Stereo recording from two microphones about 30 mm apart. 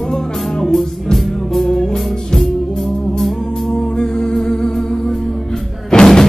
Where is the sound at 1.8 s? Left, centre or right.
Left.